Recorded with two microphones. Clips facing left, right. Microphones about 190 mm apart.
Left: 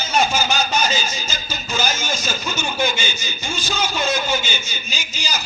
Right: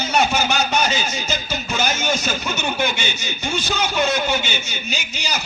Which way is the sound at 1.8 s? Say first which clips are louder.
Right 3 dB; 65° right (ahead or behind).